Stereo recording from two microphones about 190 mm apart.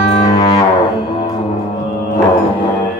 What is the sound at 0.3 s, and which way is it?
Music, 30° left (ahead or behind).